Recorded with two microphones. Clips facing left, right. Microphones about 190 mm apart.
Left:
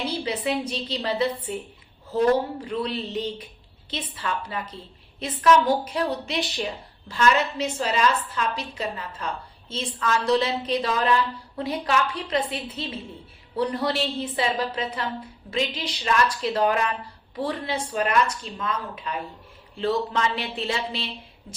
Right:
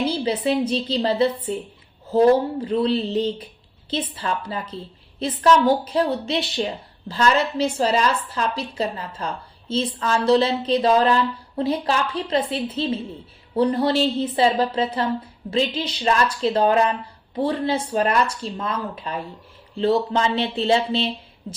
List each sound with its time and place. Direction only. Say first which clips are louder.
0.7 s a woman's voice: right 6 dB; 30° right (ahead or behind)